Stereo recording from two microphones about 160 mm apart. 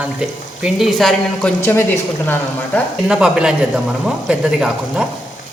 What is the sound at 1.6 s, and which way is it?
A woman's voice, 15° left (ahead or behind).